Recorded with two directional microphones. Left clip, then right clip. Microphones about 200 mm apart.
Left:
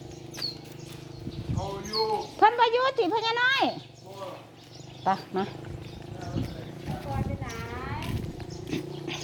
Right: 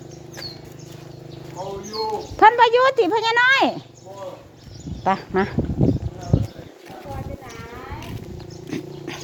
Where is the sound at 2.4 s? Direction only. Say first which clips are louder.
Right 8 dB; 30° right (ahead or behind).